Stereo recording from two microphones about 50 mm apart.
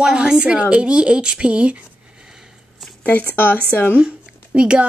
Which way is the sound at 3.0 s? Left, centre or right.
Left.